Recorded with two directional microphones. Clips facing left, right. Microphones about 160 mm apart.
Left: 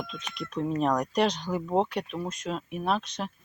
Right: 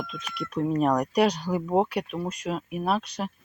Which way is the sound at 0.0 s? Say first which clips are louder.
Right 2 dB; 5° right (ahead or behind).